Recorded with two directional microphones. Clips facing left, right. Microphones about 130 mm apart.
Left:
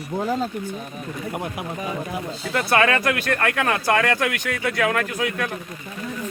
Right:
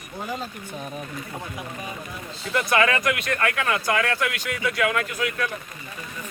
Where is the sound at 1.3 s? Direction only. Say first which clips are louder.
Left 7 dB; 90° left.